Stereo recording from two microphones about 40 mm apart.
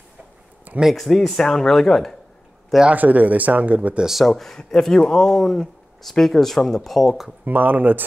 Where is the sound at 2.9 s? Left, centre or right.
Right.